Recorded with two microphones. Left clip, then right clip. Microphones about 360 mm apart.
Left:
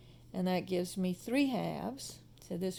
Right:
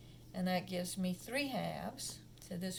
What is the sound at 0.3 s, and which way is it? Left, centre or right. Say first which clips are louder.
Speech: left 4 dB; centre.